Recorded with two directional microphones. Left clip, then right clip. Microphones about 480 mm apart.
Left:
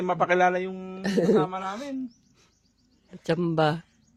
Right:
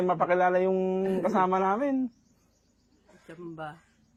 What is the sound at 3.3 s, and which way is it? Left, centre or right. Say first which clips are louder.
Speech: left 16 dB; left.